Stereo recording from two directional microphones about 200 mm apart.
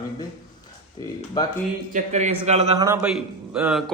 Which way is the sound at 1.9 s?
35° right (ahead or behind).